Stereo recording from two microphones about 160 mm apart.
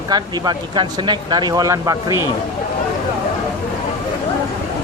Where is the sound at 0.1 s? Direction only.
25° right (ahead or behind).